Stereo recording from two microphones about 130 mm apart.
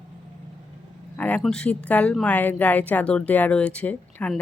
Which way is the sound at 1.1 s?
10° left (ahead or behind).